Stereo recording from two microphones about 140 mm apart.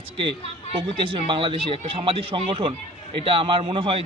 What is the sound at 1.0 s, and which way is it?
A man's voice, 40° right (ahead or behind).